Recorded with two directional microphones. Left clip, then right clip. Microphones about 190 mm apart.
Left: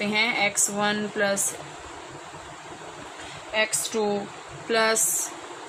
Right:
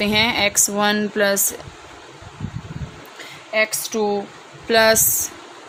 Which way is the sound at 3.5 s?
55° right (ahead or behind).